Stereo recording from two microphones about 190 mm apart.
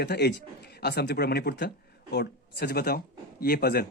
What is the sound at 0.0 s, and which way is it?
A man's voice, 60° left (ahead or behind).